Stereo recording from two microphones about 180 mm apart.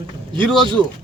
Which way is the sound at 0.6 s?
25° right (ahead or behind).